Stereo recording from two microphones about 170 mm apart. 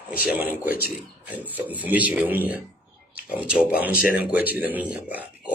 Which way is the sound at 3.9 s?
60° left (ahead or behind).